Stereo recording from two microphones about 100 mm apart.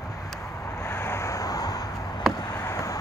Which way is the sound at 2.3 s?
30° left (ahead or behind).